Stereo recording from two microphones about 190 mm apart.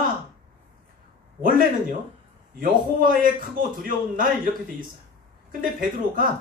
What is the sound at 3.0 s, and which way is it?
Speech, 45° right (ahead or behind).